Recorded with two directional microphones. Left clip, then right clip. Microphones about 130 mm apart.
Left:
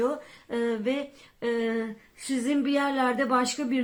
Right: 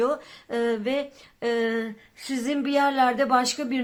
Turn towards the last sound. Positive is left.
turn(degrees=-25)  # may be behind; listen again after turning